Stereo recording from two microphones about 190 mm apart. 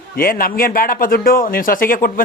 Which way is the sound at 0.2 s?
50° left (ahead or behind).